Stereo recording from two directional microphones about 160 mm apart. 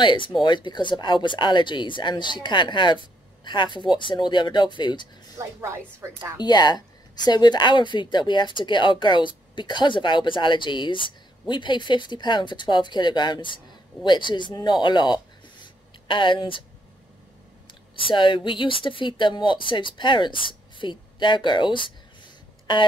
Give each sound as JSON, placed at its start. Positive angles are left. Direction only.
{"t": 0.0, "sound": "speech", "side_deg": 30}
{"t": 5.4, "sound": "a woman's voice", "side_deg": -15}
{"t": 6.4, "sound": "speech", "side_deg": 25}
{"t": 15.6, "sound": "a sound", "side_deg": 30}
{"t": 17.9, "sound": "speech", "side_deg": 30}